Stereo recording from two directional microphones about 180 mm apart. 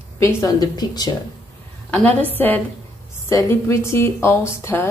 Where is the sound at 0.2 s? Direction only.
20° left (ahead or behind).